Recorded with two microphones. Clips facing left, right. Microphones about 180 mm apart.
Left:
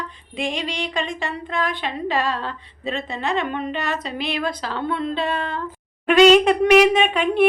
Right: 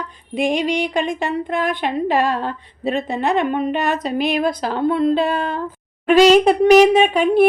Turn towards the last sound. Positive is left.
turn(degrees=-35)  # may be behind; listen again after turning